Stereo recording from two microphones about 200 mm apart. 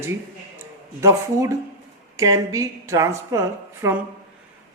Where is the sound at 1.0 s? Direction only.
15° right (ahead or behind).